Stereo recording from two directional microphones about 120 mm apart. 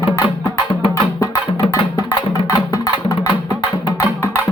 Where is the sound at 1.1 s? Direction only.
30° left (ahead or behind).